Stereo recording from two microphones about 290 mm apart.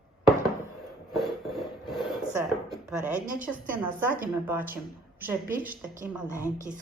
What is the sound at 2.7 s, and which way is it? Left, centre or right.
A woman's voice, centre.